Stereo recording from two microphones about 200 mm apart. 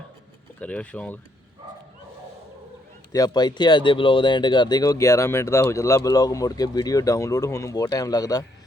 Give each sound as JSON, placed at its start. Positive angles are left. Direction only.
{"t": 0.6, "sound": "speech", "side_deg": 5}
{"t": 3.1, "sound": "speech", "side_deg": 20}